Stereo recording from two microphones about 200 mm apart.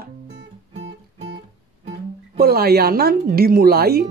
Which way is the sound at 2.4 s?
50° right (ahead or behind).